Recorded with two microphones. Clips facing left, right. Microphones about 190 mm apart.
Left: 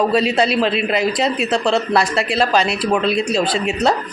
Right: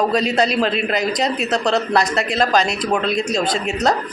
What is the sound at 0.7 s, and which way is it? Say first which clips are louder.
A man's voice: left 2 dB; 40° right (ahead or behind).